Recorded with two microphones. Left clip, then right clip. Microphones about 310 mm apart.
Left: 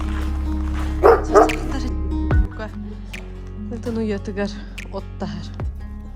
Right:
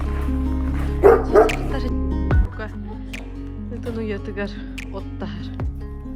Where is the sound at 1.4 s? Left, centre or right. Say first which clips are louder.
Left 1 dB; centre.